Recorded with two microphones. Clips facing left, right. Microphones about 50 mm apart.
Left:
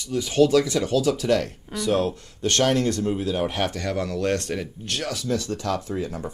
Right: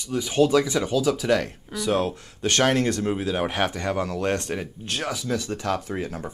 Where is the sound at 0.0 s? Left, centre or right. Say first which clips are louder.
Left 1 dB; right.